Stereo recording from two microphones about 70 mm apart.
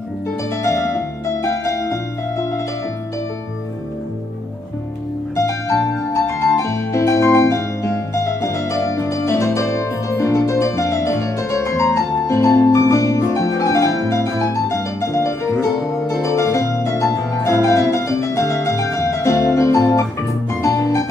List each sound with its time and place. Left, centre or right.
0.7 s music: left
5.3 s keyboard: left
20.6 s music: left